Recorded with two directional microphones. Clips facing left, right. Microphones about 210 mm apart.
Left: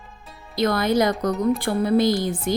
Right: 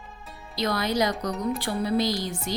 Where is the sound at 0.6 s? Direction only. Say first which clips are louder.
Left 5 dB; 50° left (ahead or behind).